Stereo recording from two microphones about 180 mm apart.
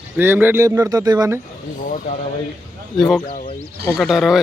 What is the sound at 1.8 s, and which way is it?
Speech, 50° left (ahead or behind).